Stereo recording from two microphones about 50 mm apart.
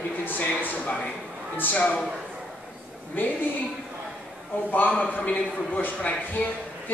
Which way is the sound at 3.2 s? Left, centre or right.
Left.